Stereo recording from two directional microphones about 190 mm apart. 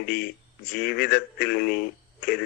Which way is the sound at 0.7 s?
55° left (ahead or behind).